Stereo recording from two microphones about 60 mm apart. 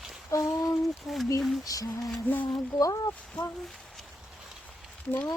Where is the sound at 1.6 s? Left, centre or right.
Left.